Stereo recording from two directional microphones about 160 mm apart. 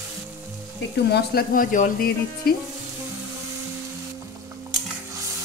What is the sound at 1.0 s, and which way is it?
Speech, 80° left.